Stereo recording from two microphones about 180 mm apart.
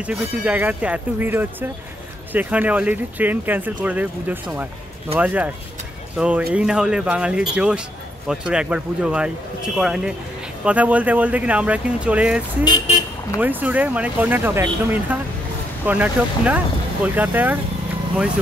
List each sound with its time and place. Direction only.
0.0 s speech: 5° right (ahead or behind)
13.4 s speech: 10° right (ahead or behind)